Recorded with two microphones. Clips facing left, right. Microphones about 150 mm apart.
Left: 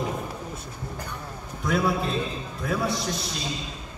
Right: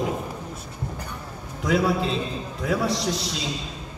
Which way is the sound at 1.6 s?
90° right.